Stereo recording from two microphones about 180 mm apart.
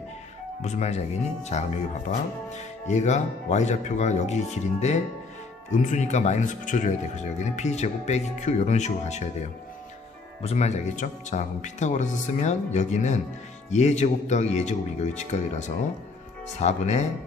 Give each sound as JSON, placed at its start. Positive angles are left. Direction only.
{"t": 0.6, "sound": "speech", "side_deg": 40}
{"t": 10.4, "sound": "speech", "side_deg": 35}